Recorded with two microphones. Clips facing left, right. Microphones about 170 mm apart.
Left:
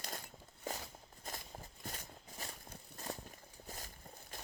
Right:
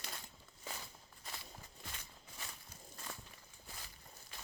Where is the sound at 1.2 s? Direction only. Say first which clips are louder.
Left 4 dB; 45° left (ahead or behind).